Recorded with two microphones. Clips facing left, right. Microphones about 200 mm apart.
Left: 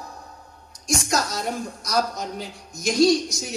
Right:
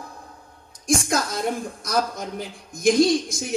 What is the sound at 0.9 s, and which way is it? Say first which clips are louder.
A woman's voice: right 2 dB; 55° right (ahead or behind).